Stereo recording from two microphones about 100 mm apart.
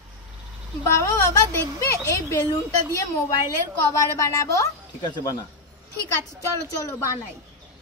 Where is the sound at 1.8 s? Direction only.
30° left (ahead or behind).